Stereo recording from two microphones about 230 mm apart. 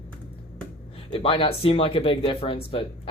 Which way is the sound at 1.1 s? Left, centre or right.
Left.